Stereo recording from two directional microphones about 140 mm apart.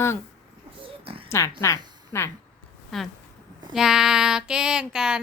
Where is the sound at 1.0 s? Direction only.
40° right (ahead or behind).